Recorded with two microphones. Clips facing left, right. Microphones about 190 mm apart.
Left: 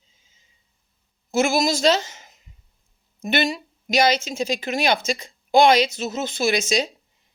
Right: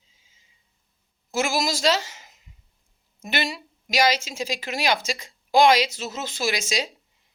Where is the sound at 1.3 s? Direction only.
20° left (ahead or behind).